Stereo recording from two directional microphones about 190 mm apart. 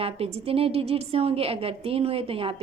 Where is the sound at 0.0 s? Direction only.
30° right (ahead or behind).